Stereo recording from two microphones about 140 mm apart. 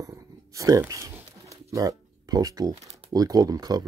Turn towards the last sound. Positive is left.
turn(degrees=-25)  # may be behind; listen again after turning